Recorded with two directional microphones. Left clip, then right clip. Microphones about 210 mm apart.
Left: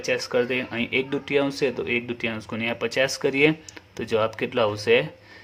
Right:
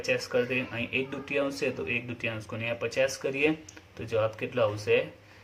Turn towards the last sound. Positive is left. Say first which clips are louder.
# left 5 dB
turn(degrees=40)  # may be behind; listen again after turning